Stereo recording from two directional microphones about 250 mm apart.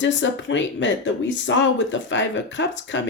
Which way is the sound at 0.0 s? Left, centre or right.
Left.